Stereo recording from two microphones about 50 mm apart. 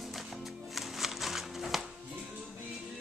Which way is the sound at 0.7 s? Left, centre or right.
Centre.